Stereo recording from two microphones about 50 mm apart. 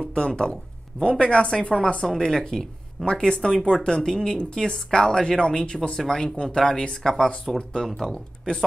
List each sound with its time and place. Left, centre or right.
0.0 s speech: centre